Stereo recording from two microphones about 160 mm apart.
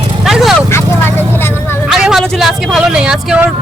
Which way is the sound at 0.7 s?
15° left (ahead or behind).